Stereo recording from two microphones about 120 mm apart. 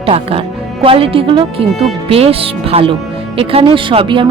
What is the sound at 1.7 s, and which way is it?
Speech, centre (ahead or behind).